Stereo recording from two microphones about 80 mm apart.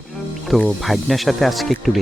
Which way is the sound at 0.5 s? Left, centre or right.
Centre.